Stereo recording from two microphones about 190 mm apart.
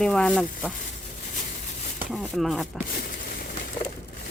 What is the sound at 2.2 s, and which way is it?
Speech, centre (ahead or behind).